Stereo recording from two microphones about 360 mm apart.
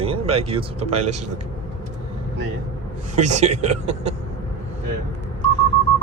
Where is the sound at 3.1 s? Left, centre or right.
Centre.